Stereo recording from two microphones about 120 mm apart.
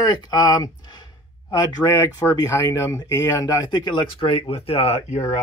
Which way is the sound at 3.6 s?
40° left (ahead or behind).